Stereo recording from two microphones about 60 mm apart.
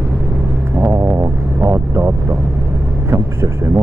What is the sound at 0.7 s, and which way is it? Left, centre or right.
Vehicle, right.